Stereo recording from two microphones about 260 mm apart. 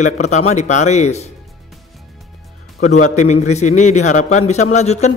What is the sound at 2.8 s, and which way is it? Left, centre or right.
A man's voice, left.